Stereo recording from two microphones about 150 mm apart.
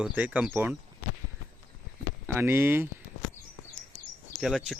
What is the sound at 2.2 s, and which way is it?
Speech, 15° right (ahead or behind).